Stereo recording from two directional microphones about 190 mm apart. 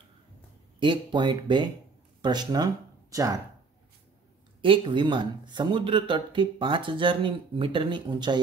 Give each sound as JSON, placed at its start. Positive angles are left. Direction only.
{"t": 0.7, "sound": "speech", "side_deg": -25}
{"t": 4.6, "sound": "speech", "side_deg": -25}